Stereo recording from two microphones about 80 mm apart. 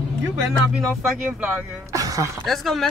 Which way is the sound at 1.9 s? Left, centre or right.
Right.